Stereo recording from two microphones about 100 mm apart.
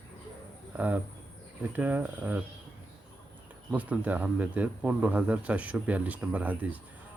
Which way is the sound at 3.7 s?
15° right (ahead or behind).